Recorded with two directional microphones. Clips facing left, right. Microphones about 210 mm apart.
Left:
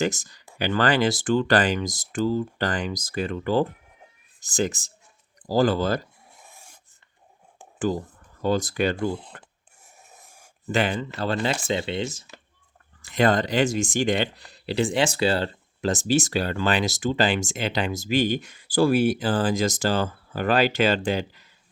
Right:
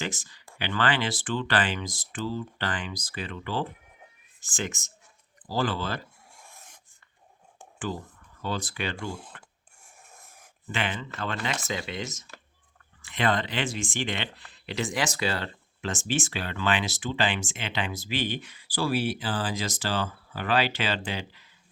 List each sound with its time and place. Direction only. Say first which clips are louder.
0.0 s speech: left 9 dB; 45° left (ahead or behind)
6.5 s filing: left 2 dB; 10° left (ahead or behind)
7.8 s speech: left 8 dB; 40° left (ahead or behind)
9.0 s speech: left 8 dB; 25° left (ahead or behind)
10.2 s a sound: left 1 dB; centre (ahead or behind)
10.7 s speech: left 8 dB; 40° left (ahead or behind)
13.0 s speech: left 6 dB; 40° left (ahead or behind)